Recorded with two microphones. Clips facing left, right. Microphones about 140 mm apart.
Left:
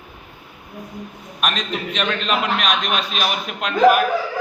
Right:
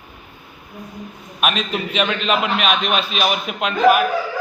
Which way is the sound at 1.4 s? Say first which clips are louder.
Right 3 dB; 5° right (ahead or behind).